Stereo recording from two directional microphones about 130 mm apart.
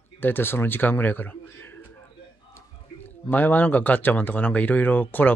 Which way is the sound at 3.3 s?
15° left (ahead or behind).